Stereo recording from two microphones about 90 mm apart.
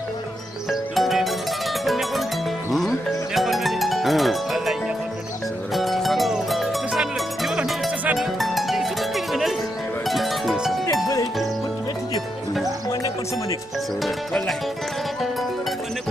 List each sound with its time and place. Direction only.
0.7 s music: centre (ahead or behind)
3.3 s music: centre (ahead or behind)
5.8 s music: centre (ahead or behind)
8.2 s harp: centre (ahead or behind)
10.0 s music: centre (ahead or behind)
12.9 s music: 40° left (ahead or behind)